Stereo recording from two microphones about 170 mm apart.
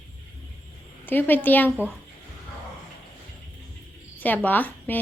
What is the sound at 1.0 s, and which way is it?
Speech, 10° left (ahead or behind).